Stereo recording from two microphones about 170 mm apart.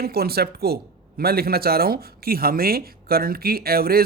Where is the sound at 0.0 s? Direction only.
65° right (ahead or behind).